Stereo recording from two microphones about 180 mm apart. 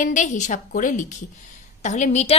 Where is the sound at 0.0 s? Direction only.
45° left (ahead or behind).